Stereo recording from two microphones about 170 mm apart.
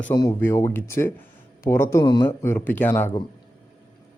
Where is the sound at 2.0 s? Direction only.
25° left (ahead or behind).